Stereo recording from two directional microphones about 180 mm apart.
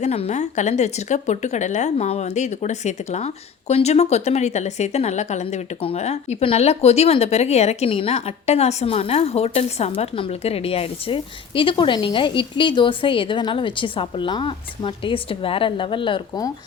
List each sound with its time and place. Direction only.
0.0 s speech: 35° left (ahead or behind)